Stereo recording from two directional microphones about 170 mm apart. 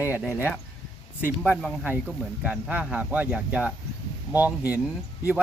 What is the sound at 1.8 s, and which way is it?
Speech, 10° right (ahead or behind).